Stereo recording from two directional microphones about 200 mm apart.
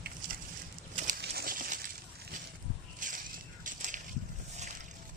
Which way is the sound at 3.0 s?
40° right (ahead or behind).